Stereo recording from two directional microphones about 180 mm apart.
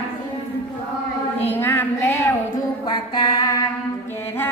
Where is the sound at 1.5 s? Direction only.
10° left (ahead or behind).